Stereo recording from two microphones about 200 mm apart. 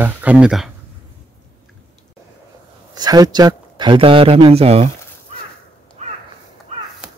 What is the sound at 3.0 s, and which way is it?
A man's voice, 20° right (ahead or behind).